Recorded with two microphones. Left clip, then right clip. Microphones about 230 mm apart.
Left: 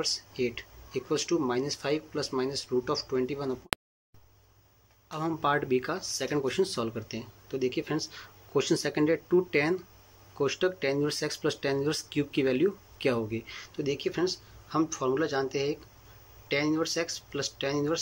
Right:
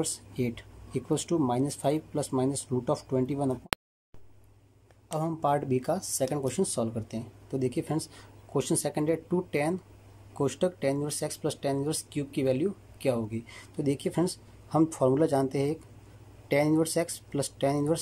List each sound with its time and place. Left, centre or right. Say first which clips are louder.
0.0 s speech: left 2 dB; right
5.1 s speech: even; right